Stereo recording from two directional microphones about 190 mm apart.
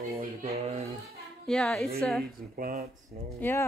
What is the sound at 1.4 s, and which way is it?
Speech, centre (ahead or behind).